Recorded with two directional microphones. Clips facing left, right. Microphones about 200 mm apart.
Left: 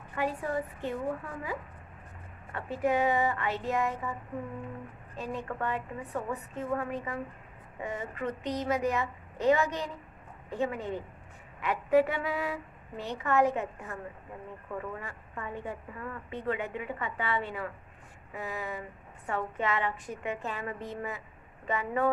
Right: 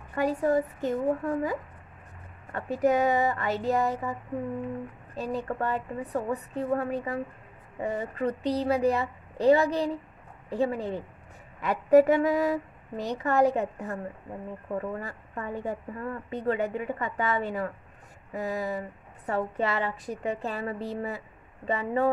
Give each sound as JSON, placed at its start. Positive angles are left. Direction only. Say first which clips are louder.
{"t": 0.1, "sound": "a woman's voice", "louder": "right 7 dB", "side_deg": -40}